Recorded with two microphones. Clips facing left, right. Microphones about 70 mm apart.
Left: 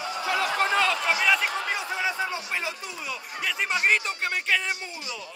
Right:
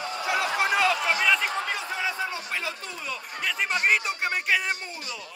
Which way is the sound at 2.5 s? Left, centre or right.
Centre.